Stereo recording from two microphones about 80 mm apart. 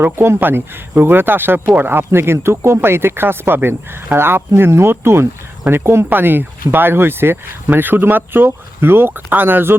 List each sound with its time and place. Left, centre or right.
0.0 s speech: right